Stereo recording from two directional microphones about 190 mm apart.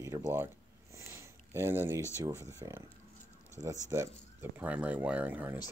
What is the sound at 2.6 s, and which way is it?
Speech, 15° right (ahead or behind).